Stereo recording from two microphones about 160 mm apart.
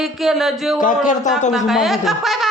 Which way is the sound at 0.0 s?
Centre (ahead or behind).